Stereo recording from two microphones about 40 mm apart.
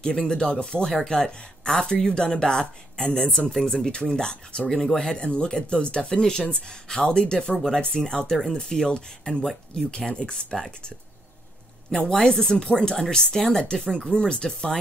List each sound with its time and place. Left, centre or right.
0.0 s speech: left
3.8 s speech: left
8.1 s speech: left
12.1 s speech: centre